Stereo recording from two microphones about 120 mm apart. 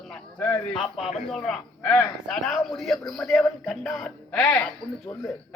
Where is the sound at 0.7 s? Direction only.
Centre (ahead or behind).